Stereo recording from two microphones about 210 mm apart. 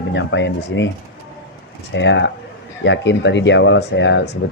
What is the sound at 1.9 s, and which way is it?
Speech, 60° left (ahead or behind).